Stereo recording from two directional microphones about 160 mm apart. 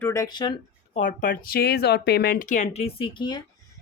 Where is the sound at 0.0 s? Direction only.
20° left (ahead or behind).